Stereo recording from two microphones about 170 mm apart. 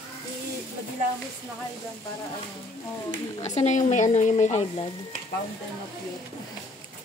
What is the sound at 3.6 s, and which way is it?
Speech, 45° left (ahead or behind).